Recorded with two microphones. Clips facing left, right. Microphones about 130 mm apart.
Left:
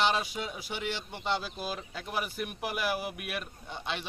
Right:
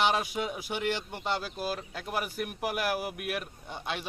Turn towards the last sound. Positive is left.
turn(degrees=-5)  # may be behind; listen again after turning